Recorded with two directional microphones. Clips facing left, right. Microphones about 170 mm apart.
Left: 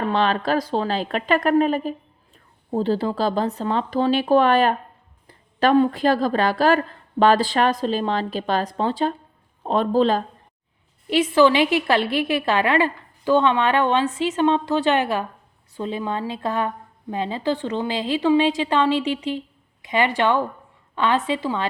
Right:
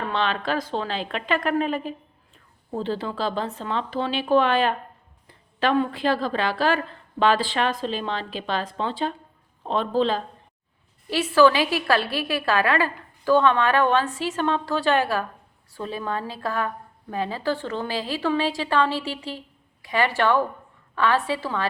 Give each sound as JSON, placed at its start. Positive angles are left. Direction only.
{"t": 0.1, "sound": "a woman's voice", "side_deg": 40}
{"t": 11.1, "sound": "a woman's voice", "side_deg": 20}